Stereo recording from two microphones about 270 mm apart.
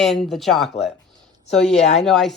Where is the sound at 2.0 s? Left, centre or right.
Centre.